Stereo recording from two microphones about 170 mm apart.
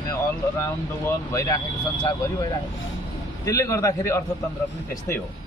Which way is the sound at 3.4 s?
20° left (ahead or behind).